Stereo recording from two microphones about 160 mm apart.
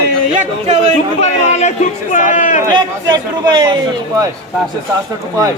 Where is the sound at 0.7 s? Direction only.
45° right (ahead or behind).